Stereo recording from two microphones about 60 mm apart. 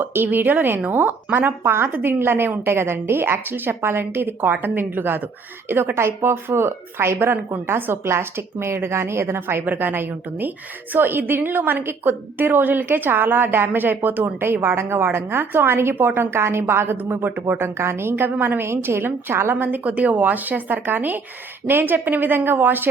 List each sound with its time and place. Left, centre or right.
0.0 s a woman's voice: right